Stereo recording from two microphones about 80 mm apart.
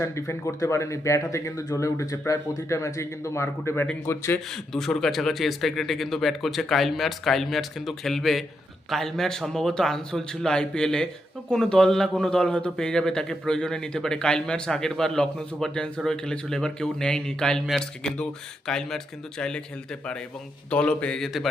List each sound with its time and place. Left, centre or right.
0.0 s speech: left
4.5 s a man's voice: centre
20.7 s a man's voice: centre